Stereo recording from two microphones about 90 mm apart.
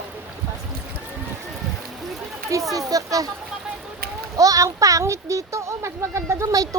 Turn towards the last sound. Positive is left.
turn(degrees=-35)  # may be behind; listen again after turning